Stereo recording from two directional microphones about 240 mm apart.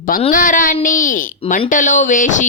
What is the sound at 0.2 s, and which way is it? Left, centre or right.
Speech, left.